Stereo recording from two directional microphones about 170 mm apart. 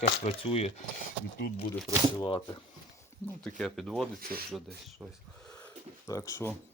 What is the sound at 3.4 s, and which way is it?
Speech, 5° left (ahead or behind).